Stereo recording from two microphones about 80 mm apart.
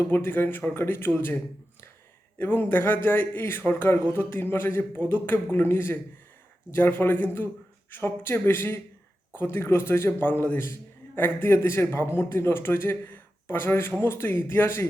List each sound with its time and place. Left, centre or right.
0.0 s a man's voice: left
2.4 s a man's voice: left